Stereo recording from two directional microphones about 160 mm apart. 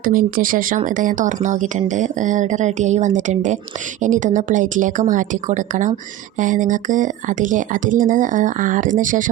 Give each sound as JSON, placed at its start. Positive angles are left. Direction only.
{"t": 0.0, "sound": "speech", "side_deg": -60}